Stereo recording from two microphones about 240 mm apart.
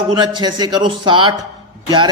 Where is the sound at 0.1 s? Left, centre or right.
Centre.